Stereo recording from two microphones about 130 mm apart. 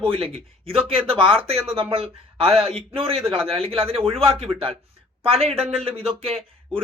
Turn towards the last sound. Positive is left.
turn(degrees=-45)  # may be behind; listen again after turning